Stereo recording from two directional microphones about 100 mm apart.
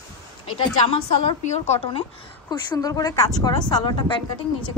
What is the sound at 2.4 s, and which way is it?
A woman's voice, 40° left (ahead or behind).